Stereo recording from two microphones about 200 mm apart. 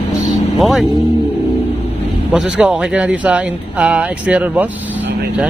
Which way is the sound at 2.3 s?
5° right (ahead or behind).